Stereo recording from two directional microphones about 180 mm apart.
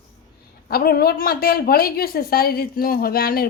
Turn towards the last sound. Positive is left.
turn(degrees=55)  # may be behind; listen again after turning